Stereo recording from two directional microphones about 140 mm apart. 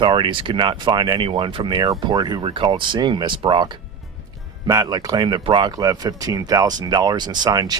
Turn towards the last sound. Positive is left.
turn(degrees=-25)  # may be behind; listen again after turning